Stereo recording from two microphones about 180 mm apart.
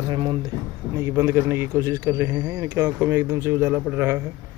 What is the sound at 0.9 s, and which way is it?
Speech, 15° right (ahead or behind).